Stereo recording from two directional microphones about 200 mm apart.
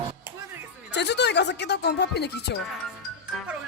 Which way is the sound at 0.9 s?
60° left (ahead or behind).